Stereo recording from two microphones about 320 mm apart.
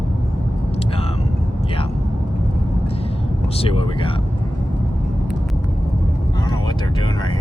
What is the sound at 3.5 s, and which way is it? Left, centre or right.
Speech, centre.